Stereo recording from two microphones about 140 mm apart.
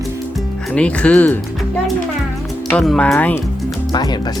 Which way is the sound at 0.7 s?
10° left (ahead or behind).